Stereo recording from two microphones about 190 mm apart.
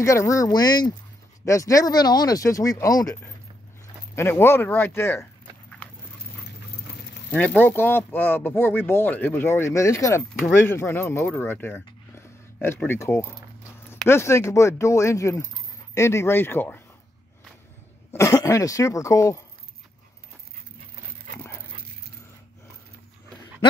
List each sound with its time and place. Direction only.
0.0 s speech: 15° left (ahead or behind)
5.2 s dog: 5° left (ahead or behind)
7.3 s speech: 10° left (ahead or behind)
18.1 s speech: 15° left (ahead or behind)